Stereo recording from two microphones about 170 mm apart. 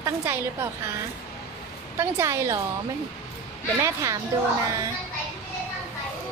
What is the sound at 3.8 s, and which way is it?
Speech, 20° right (ahead or behind).